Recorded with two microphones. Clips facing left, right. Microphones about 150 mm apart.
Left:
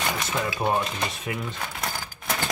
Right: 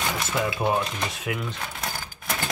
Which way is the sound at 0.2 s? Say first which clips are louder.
Right 1 dB; 5° right (ahead or behind).